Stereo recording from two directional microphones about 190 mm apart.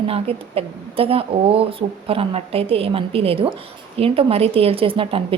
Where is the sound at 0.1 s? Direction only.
30° right (ahead or behind).